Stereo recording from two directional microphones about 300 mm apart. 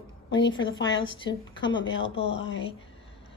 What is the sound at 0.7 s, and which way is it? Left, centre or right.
Speech, left.